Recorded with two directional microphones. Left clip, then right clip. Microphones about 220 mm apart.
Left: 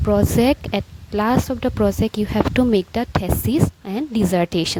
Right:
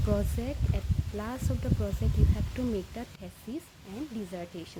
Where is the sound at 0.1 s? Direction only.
45° left (ahead or behind).